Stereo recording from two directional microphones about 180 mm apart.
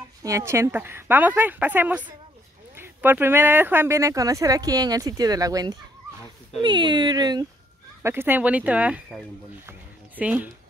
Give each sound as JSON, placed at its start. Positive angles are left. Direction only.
{"t": 0.2, "sound": "speech", "side_deg": -15}
{"t": 8.0, "sound": "speech", "side_deg": -15}